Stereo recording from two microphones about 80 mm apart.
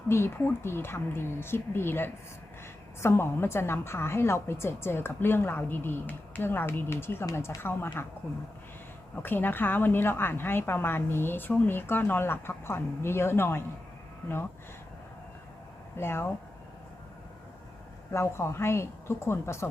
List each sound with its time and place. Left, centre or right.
0.1 s a woman's voice: left
9.1 s a woman's voice: left
16.0 s a woman's voice: left
18.1 s a woman's voice: left